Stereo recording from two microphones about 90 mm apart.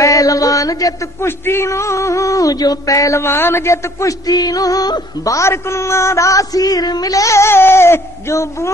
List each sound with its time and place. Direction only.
0.0 s a sound: 40° left (ahead or behind)
1.2 s a man's voice: 25° left (ahead or behind)
3.2 s a woman's voice: 25° left (ahead or behind)
4.3 s a man's voice: 45° left (ahead or behind)